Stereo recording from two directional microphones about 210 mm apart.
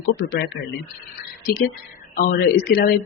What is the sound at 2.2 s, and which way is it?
Speech, 45° left (ahead or behind).